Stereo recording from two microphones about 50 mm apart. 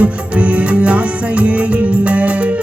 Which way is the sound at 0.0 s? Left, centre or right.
Right.